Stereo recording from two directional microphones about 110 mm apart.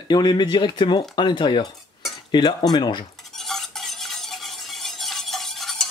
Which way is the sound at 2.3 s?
40° left (ahead or behind).